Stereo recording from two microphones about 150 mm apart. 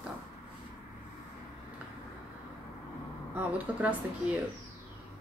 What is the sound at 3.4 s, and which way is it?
A woman's voice, 10° right (ahead or behind).